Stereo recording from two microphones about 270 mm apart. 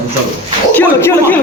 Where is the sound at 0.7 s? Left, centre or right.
Centre.